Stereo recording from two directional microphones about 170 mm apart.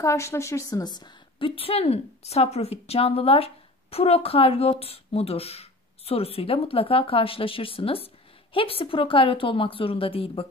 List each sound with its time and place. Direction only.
0.0 s a woman's voice: 15° left (ahead or behind); by 10.4 s 35° left (ahead or behind)